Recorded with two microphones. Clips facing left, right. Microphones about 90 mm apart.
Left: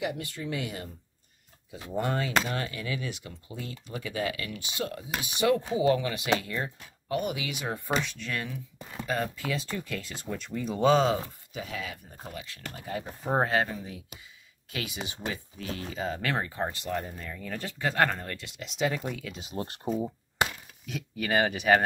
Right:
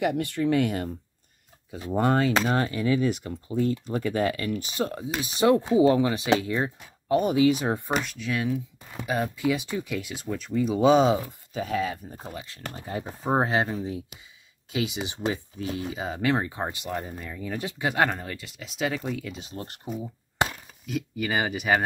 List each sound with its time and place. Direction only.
0.0 s speech: 60° right (ahead or behind)
1.9 s speech: 40° right (ahead or behind); by 6.7 s 20° right (ahead or behind)
7.1 s speech: 35° right (ahead or behind)
7.9 s speech: 5° right (ahead or behind)
10.9 s speech: 15° right (ahead or behind)
11.5 s speech: 40° right (ahead or behind)
13.3 s speech: 20° right (ahead or behind); by 19.5 s centre (ahead or behind)
19.5 s speech: 25° left (ahead or behind)
20.8 s speech: centre (ahead or behind)